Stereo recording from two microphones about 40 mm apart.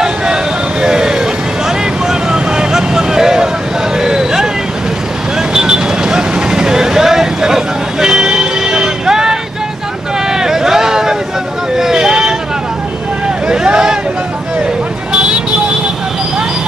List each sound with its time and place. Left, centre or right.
0.0 s vehicle: centre
4.0 s a sound: centre
5.5 s vehicle: centre
13.5 s vehicle: centre